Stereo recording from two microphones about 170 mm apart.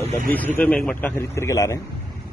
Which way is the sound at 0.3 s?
10° left (ahead or behind).